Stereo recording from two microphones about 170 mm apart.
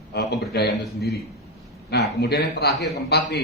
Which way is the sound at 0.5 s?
70° left (ahead or behind).